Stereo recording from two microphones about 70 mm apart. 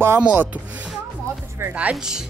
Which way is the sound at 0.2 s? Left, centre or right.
Centre.